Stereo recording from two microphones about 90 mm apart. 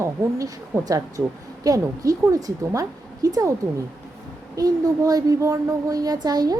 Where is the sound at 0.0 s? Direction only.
40° right (ahead or behind).